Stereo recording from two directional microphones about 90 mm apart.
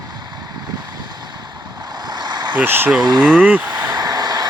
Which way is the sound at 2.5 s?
20° right (ahead or behind).